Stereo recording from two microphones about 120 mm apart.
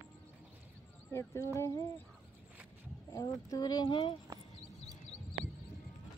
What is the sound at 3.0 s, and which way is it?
Speech, 30° left (ahead or behind).